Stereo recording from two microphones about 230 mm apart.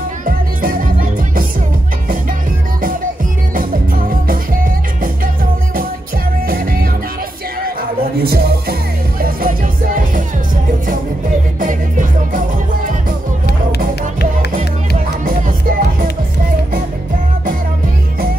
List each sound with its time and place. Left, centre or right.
0.2 s music: right
3.5 s music: right
6.4 s music: right
8.2 s music: right
11.6 s music: right
15.0 s music: right